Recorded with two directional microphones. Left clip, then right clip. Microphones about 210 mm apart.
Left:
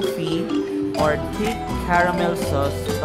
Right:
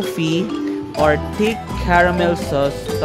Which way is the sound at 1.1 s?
25° right (ahead or behind).